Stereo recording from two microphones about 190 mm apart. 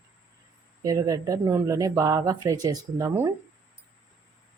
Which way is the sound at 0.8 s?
20° right (ahead or behind).